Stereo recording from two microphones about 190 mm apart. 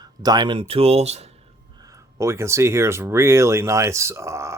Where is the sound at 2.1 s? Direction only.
15° right (ahead or behind).